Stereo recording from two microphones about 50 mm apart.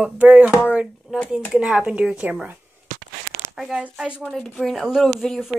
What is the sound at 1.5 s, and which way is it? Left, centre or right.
Speech, centre.